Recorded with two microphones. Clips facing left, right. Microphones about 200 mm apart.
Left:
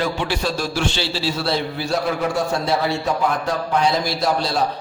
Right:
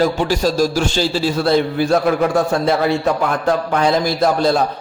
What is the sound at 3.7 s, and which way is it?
Speech, 50° right (ahead or behind).